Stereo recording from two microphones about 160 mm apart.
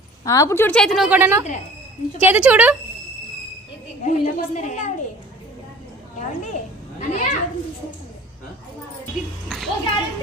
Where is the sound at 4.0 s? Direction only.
50° left (ahead or behind).